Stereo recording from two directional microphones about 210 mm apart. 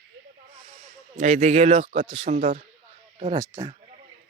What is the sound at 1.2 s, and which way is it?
A man's voice, 30° right (ahead or behind).